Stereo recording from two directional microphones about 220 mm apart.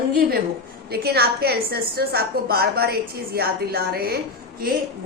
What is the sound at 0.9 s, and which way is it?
A woman's voice, 45° right (ahead or behind).